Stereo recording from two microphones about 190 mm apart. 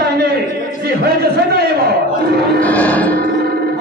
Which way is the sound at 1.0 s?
55° right (ahead or behind).